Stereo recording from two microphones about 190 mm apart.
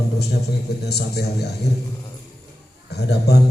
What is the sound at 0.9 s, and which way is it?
Speech, 60° left (ahead or behind).